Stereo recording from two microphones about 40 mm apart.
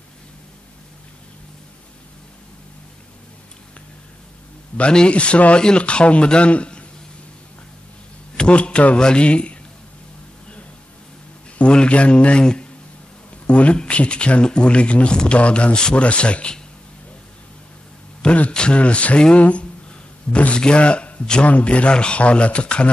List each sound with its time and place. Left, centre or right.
4.9 s speech: left
8.4 s a man's voice: left
11.5 s speech: left
13.5 s speech: left
18.2 s a man's voice: left
18.5 s speech: left
18.8 s a sound: left
20.5 s speech: left